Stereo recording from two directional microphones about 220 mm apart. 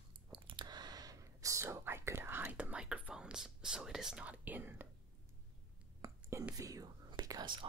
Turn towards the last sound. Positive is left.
turn(degrees=-20)  # may be behind; listen again after turning